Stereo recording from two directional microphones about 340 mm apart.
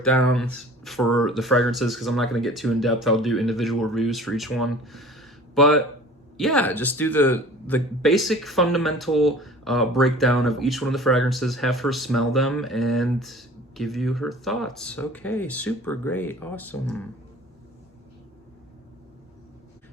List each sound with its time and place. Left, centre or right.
0.0 s speech: centre